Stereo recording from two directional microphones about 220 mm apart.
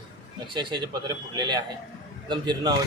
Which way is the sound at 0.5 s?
20° right (ahead or behind).